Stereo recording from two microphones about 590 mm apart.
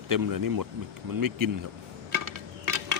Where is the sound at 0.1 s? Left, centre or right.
Right.